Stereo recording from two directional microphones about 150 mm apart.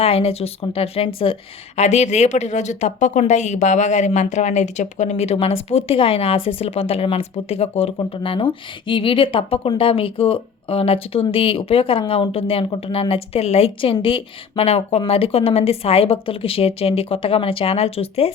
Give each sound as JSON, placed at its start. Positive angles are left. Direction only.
{"t": 0.0, "sound": "a woman's voice", "side_deg": 40}